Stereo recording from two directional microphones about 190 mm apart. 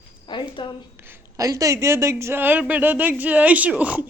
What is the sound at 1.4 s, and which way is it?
A woman's voice, 15° right (ahead or behind).